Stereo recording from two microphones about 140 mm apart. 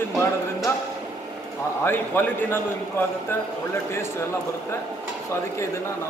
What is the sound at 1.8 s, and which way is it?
A man's voice, 15° left (ahead or behind).